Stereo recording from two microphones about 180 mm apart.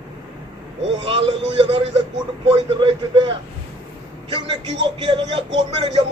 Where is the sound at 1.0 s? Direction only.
25° right (ahead or behind).